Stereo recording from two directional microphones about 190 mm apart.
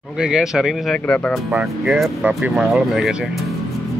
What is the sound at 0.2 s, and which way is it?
Speech, centre (ahead or behind).